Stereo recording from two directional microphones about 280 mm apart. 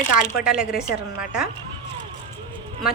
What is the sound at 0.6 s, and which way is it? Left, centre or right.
Speech, centre.